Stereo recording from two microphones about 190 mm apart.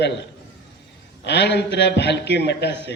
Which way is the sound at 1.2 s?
65° left (ahead or behind).